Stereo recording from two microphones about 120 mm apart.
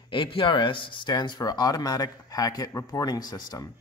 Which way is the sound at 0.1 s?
45° left (ahead or behind).